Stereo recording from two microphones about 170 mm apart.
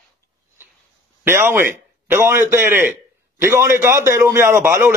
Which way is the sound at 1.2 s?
15° right (ahead or behind).